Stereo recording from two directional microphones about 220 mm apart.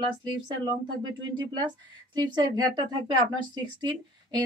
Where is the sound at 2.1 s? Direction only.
20° right (ahead or behind).